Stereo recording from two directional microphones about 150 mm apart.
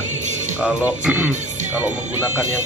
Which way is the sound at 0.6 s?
5° right (ahead or behind).